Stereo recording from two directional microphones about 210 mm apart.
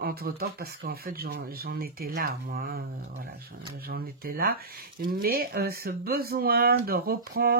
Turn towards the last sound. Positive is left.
turn(degrees=-45)  # may be behind; listen again after turning